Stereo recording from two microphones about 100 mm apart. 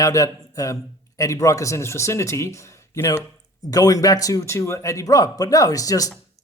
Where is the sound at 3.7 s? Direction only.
35° left (ahead or behind).